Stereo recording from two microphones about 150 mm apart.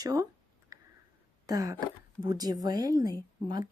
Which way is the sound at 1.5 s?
25° right (ahead or behind).